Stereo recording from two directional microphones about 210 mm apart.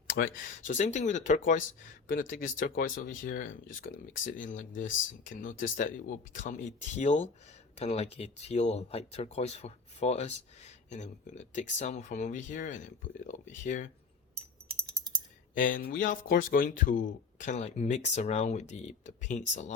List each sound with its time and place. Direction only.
0.1 s speech: 65° left (ahead or behind)
0.6 s speech: 35° left (ahead or behind)
15.5 s speech: 40° left (ahead or behind)